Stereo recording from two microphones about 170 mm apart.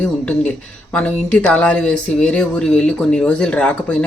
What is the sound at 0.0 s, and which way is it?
Speech, 10° left (ahead or behind).